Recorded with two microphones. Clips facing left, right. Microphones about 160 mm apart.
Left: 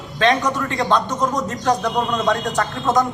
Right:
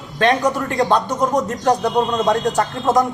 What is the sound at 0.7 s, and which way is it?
Speech, 15° right (ahead or behind).